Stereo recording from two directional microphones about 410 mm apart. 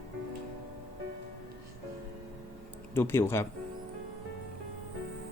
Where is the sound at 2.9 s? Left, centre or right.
Centre.